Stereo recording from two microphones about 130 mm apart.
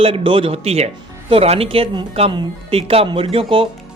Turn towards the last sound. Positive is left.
turn(degrees=-45)  # may be behind; listen again after turning